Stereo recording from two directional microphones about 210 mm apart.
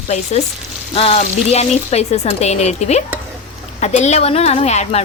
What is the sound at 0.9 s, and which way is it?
A woman's voice, 30° left (ahead or behind).